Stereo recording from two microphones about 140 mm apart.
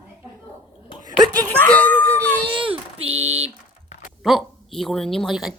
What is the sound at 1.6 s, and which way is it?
Dog, 10° left (ahead or behind).